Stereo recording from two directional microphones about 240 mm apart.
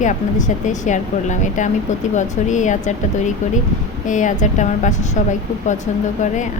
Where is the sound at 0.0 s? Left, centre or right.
Left.